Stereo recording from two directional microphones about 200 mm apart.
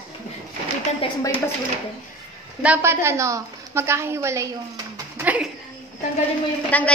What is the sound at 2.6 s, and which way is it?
A woman's voice, 10° right (ahead or behind).